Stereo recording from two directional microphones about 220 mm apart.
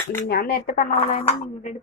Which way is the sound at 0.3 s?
40° left (ahead or behind).